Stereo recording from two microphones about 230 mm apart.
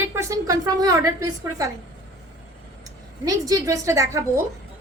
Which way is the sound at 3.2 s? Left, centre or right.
Centre.